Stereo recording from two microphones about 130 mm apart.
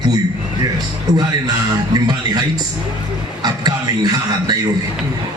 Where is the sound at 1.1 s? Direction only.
65° right (ahead or behind).